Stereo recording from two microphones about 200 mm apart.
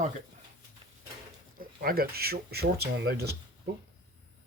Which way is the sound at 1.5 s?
45° right (ahead or behind).